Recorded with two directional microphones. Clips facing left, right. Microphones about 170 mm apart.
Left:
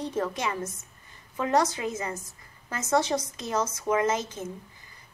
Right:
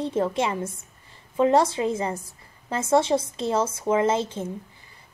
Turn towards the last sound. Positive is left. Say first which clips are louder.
# right 4 dB
turn(degrees=-30)  # may be behind; listen again after turning